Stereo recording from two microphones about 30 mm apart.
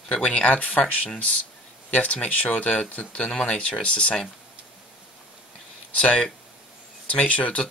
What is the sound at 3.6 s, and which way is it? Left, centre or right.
Speech, left.